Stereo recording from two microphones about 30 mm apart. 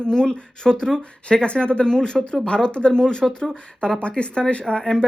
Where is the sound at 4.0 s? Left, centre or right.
Left.